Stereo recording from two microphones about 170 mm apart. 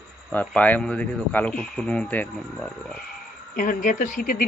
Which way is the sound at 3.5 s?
50° left (ahead or behind).